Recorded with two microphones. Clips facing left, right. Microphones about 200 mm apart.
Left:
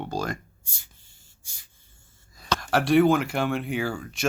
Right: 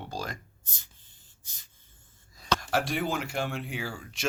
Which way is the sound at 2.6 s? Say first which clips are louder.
Left 13 dB; 70° left (ahead or behind).